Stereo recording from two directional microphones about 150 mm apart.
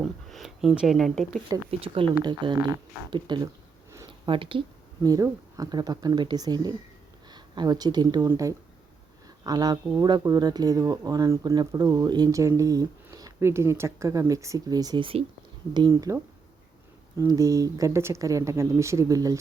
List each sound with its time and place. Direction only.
0.0 s a sound: centre (ahead or behind)
1.5 s speech: 35° right (ahead or behind)
5.0 s speech: 25° right (ahead or behind)
15.9 s speech: 20° right (ahead or behind)